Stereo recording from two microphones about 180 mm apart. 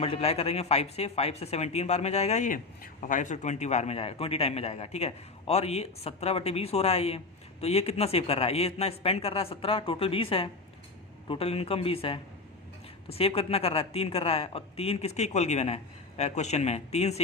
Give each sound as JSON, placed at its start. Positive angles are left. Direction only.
{"t": 0.0, "sound": "speech", "side_deg": 35}